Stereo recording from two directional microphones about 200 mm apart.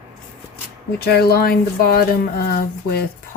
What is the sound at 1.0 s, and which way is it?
Speech, 50° left (ahead or behind).